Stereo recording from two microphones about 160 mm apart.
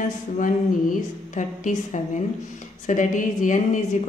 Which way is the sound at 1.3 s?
50° left (ahead or behind).